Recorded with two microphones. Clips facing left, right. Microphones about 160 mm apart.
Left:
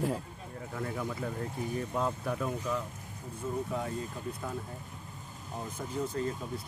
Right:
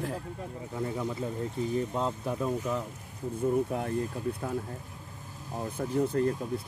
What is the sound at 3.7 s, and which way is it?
Speech, 55° right (ahead or behind).